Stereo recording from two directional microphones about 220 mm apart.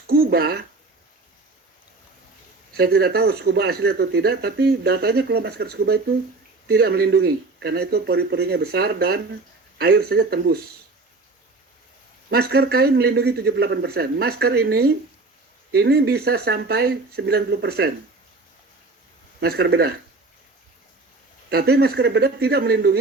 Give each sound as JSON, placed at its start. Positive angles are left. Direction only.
{"t": 0.1, "sound": "speech", "side_deg": -45}
{"t": 2.7, "sound": "speech", "side_deg": -45}
{"t": 12.3, "sound": "speech", "side_deg": -45}
{"t": 19.4, "sound": "speech", "side_deg": -45}
{"t": 21.5, "sound": "speech", "side_deg": -45}